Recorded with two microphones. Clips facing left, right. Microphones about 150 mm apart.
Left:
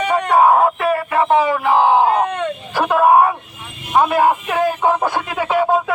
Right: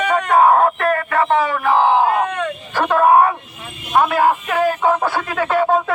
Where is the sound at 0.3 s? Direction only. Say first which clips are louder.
Even; 5° left (ahead or behind); by 2.5 s 20° left (ahead or behind).